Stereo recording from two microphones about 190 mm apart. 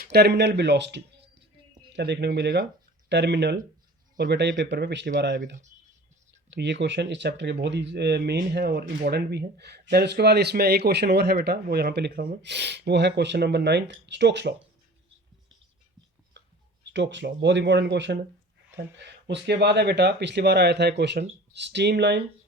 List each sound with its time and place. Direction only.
0.0 s speech: 60° right (ahead or behind)
6.5 s speech: 65° right (ahead or behind)
16.4 s clicking: 70° right (ahead or behind)
16.9 s speech: 70° right (ahead or behind)